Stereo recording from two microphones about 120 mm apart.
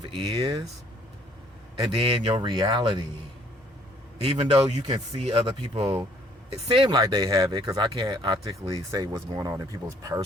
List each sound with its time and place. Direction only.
0.0 s speech: 45° right (ahead or behind)
2.0 s speech: 50° right (ahead or behind)
2.5 s speech: 40° right (ahead or behind)
4.3 s speech: 45° right (ahead or behind)
6.8 s speech: 35° right (ahead or behind)